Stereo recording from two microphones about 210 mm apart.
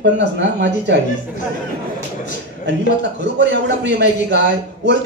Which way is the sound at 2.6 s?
55° right (ahead or behind).